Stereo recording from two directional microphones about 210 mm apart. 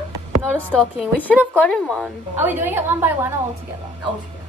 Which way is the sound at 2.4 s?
10° right (ahead or behind).